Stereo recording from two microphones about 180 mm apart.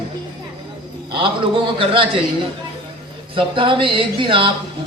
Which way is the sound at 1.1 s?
25° right (ahead or behind).